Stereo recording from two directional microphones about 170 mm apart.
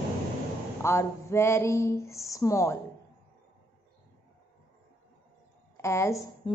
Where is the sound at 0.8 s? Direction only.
15° left (ahead or behind).